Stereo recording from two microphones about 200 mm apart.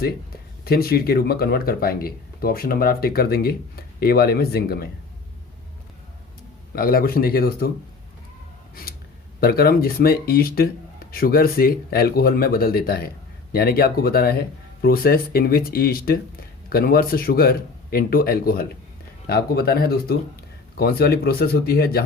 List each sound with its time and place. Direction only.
0.6 s speech: 50° left (ahead or behind)
6.7 s speech: 50° left (ahead or behind)
9.4 s speech: 50° left (ahead or behind)